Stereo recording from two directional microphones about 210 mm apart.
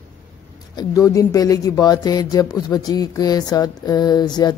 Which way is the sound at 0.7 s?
15° left (ahead or behind).